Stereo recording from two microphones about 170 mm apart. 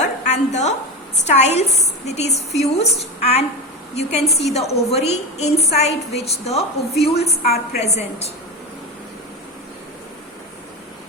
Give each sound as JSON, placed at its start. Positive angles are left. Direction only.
{"t": 0.3, "sound": "a woman's voice", "side_deg": 40}